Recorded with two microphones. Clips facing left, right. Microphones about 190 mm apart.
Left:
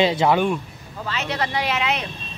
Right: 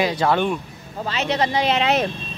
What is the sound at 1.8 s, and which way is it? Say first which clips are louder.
Speech: right 6 dB; 40° right (ahead or behind).